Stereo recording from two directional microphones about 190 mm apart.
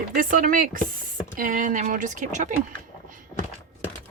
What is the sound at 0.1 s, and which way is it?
Speech, 50° right (ahead or behind).